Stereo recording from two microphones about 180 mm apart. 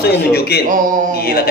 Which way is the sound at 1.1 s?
60° left (ahead or behind).